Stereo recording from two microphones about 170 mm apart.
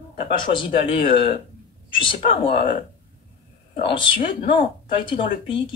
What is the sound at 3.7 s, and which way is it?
A woman's voice, 30° left (ahead or behind).